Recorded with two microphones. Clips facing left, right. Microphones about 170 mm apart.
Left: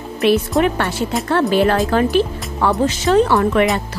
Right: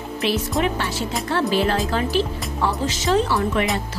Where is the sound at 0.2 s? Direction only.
55° left (ahead or behind).